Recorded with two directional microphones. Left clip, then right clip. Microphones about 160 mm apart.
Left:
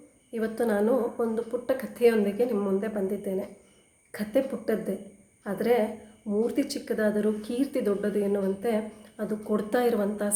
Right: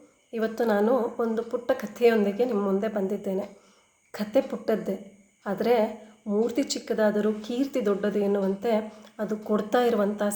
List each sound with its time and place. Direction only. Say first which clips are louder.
0.3 s speech: right 2 dB; 5° left (ahead or behind)